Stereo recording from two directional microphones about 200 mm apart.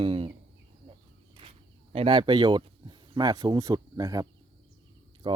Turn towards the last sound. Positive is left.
turn(degrees=-25)  # may be behind; listen again after turning